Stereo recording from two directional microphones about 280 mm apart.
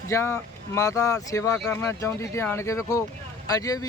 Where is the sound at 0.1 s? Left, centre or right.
Centre.